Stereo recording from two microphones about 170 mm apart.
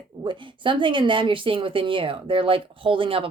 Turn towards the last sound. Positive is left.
turn(degrees=-30)  # may be behind; listen again after turning